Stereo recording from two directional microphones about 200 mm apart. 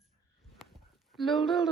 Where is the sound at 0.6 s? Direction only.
Centre (ahead or behind).